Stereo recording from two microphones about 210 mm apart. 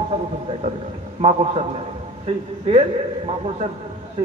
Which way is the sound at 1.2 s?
30° right (ahead or behind).